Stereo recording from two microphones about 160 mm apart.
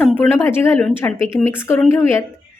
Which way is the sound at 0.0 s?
15° left (ahead or behind).